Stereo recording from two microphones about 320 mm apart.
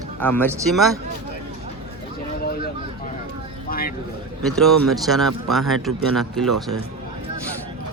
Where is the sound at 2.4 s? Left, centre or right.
Left.